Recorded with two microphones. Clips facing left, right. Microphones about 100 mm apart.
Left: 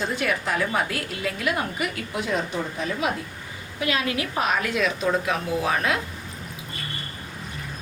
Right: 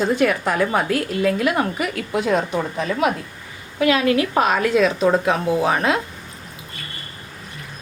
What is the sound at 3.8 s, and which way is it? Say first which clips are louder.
Speech: right 9 dB; 65° right (ahead or behind).